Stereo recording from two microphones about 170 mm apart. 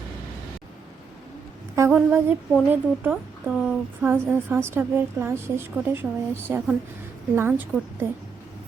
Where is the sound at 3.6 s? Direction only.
10° right (ahead or behind).